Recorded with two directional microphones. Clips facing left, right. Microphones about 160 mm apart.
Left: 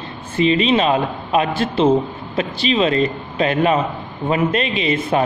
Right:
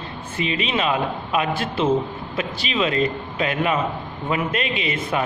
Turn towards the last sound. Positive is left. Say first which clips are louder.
# left 6 dB
turn(degrees=30)  # may be behind; listen again after turning